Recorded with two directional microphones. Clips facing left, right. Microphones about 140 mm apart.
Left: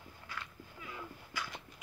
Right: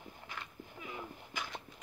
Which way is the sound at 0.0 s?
20° right (ahead or behind).